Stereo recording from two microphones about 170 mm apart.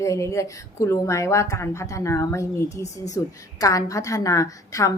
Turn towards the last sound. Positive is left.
turn(degrees=20)  # may be behind; listen again after turning